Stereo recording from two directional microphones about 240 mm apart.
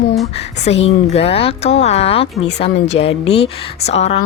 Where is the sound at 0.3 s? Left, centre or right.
Left.